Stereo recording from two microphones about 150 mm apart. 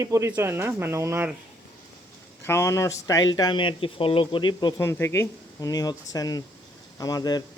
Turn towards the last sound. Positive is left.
turn(degrees=25)  # may be behind; listen again after turning